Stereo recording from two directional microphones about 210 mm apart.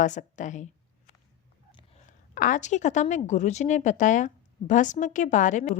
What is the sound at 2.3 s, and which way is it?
A woman's voice, 40° left (ahead or behind).